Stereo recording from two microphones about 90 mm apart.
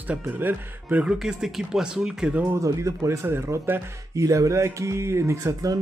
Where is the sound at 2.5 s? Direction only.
35° right (ahead or behind).